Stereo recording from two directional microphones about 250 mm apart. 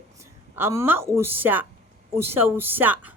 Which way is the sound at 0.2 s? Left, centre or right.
Centre.